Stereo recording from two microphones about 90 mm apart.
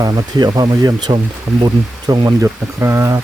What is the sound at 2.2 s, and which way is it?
Speech, 30° right (ahead or behind).